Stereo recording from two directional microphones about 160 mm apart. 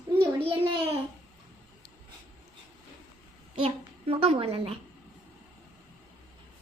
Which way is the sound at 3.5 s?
35° right (ahead or behind).